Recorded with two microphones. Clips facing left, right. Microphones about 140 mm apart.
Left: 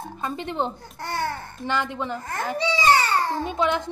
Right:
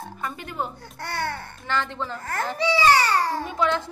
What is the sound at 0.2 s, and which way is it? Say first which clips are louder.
Speech: left 4 dB; 25° left (ahead or behind).